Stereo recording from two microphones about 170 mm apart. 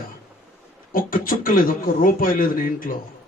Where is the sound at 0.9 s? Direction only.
55° left (ahead or behind).